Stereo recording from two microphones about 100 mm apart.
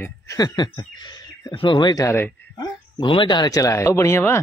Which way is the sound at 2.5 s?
45° left (ahead or behind).